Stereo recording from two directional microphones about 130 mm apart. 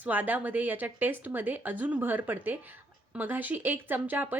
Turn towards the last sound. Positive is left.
turn(degrees=-15)  # may be behind; listen again after turning